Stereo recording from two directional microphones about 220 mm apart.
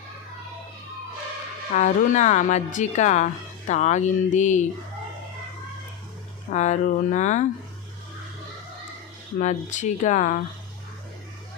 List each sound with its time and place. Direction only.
1.7 s speech: 35° left (ahead or behind)
6.5 s speech: 35° left (ahead or behind)
9.4 s speech: 35° left (ahead or behind)